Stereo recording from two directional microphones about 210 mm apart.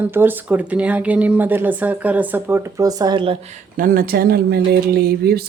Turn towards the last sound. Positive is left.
turn(degrees=-50)  # may be behind; listen again after turning